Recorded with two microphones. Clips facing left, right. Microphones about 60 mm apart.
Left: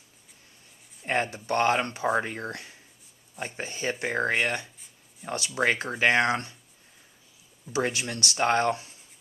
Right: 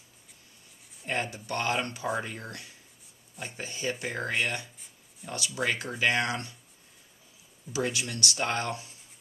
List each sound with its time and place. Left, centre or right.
1.0 s speech: left
7.7 s speech: left